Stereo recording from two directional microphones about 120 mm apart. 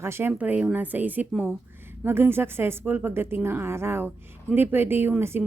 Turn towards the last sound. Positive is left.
turn(degrees=-15)  # may be behind; listen again after turning